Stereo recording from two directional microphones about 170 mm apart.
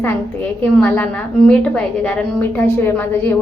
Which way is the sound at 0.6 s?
10° left (ahead or behind).